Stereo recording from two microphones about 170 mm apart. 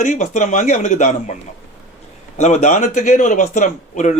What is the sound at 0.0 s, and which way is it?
A man's voice, 45° left (ahead or behind).